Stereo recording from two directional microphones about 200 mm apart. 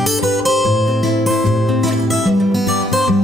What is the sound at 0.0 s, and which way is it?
Music, centre (ahead or behind).